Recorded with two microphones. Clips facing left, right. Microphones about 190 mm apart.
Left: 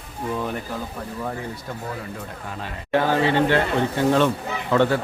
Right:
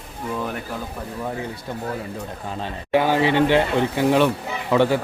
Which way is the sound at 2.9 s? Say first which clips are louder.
Right 1 dB; 15° right (ahead or behind).